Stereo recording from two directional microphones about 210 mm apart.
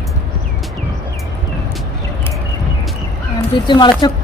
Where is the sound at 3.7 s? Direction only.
20° left (ahead or behind).